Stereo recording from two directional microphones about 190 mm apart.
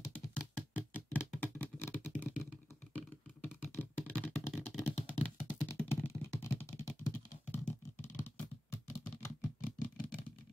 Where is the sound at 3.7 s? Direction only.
10° left (ahead or behind).